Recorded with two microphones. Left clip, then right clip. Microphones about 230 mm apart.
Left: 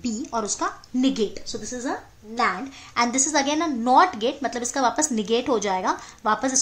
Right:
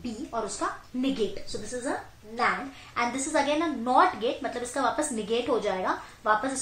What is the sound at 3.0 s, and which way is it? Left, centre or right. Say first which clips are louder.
A woman's voice: left 5 dB; left.